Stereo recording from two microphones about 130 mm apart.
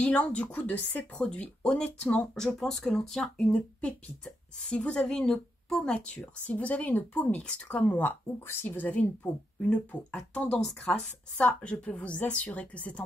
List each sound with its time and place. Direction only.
0.0 s speech: 10° left (ahead or behind)